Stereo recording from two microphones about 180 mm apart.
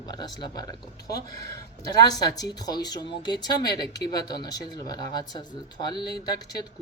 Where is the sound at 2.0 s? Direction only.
20° left (ahead or behind).